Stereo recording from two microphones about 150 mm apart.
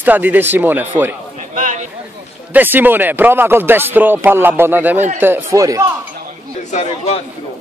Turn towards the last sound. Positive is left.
turn(degrees=40)  # may be behind; listen again after turning